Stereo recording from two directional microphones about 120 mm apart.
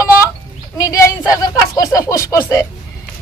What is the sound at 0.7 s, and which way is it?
Speech, 25° left (ahead or behind).